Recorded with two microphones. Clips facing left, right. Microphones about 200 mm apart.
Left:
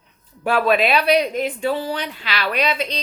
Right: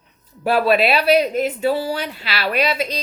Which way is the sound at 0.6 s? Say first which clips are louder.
Right 1 dB; 5° right (ahead or behind).